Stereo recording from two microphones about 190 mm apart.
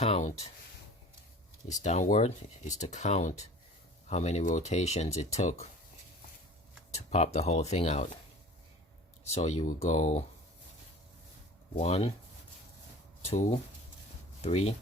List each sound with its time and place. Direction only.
0.0 s speech: 35° left (ahead or behind)
1.6 s speech: 40° left (ahead or behind)
6.9 s speech: 35° left (ahead or behind)
9.3 s speech: 35° left (ahead or behind)
11.8 s speech: 30° left (ahead or behind)
13.2 s speech: 35° left (ahead or behind)